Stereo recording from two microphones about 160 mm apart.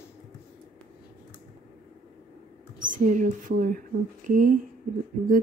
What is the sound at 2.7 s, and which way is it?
Speech, 55° right (ahead or behind).